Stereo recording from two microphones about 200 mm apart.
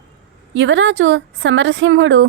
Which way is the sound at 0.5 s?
65° right (ahead or behind).